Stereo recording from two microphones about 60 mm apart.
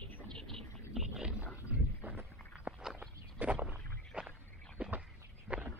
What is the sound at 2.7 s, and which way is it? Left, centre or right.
Walk, centre.